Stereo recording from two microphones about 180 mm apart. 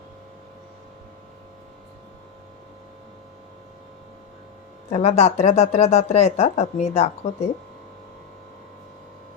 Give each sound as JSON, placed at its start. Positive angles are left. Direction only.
{"t": 4.9, "sound": "speech", "side_deg": 35}